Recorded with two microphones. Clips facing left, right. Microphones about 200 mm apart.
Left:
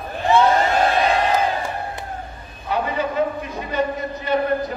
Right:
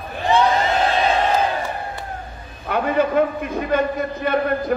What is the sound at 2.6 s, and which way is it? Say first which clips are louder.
A man's voice: right 4 dB; 55° right (ahead or behind).